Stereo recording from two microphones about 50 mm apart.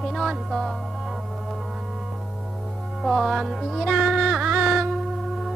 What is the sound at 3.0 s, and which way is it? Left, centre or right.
Music, centre.